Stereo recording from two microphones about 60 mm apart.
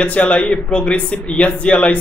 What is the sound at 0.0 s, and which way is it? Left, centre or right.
Speech, left.